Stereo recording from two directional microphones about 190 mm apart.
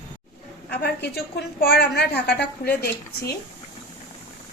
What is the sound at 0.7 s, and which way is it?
A woman's voice, 60° left (ahead or behind).